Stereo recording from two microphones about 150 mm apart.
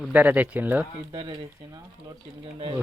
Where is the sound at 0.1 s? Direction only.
10° right (ahead or behind).